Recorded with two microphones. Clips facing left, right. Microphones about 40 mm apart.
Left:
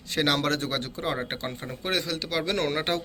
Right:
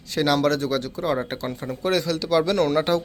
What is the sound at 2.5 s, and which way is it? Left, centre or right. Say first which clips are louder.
Speech: right 6 dB; left.